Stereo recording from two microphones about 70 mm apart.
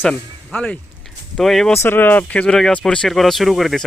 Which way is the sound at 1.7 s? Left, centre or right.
Left.